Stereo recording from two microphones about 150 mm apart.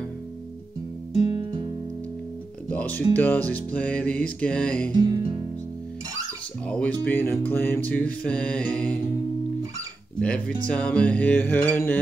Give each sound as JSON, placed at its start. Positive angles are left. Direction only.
{"t": 2.7, "sound": "speech", "side_deg": 10}
{"t": 4.9, "sound": "music", "side_deg": -25}
{"t": 6.6, "sound": "speech", "side_deg": 10}
{"t": 10.2, "sound": "speech", "side_deg": 10}